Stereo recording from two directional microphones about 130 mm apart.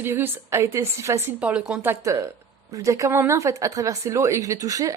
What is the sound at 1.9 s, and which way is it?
A woman's voice, 25° right (ahead or behind).